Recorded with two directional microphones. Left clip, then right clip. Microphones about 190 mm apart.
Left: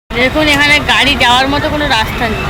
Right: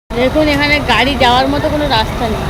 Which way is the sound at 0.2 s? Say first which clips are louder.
Left 2 dB; 15° right (ahead or behind).